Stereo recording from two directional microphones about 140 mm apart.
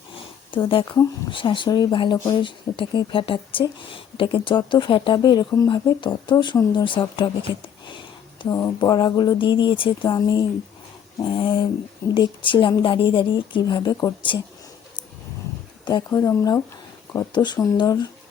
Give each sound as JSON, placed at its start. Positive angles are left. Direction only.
{"t": 0.5, "sound": "speech", "side_deg": 40}
{"t": 8.4, "sound": "speech", "side_deg": 25}
{"t": 15.8, "sound": "speech", "side_deg": 30}
{"t": 17.3, "sound": "speech", "side_deg": 30}